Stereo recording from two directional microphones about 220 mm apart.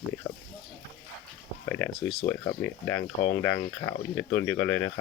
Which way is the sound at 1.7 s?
10° left (ahead or behind).